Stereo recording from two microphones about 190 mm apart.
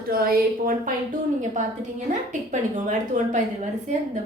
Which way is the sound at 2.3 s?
40° right (ahead or behind).